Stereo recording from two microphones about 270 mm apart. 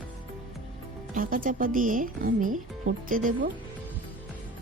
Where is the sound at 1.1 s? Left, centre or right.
Right.